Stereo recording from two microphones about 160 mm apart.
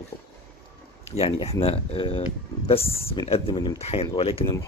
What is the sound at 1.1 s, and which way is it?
Speech, 40° left (ahead or behind).